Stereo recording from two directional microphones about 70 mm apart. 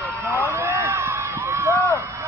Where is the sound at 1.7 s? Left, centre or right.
Left.